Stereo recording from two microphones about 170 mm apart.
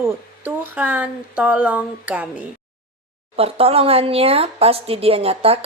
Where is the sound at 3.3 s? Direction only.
35° right (ahead or behind).